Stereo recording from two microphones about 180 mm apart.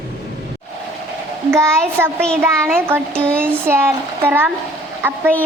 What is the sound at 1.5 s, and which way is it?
Speech, 15° right (ahead or behind).